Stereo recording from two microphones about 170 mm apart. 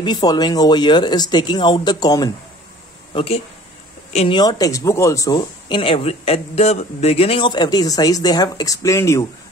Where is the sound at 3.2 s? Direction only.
35° left (ahead or behind).